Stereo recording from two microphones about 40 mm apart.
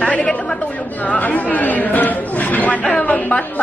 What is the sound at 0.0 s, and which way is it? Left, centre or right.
Chatter, left.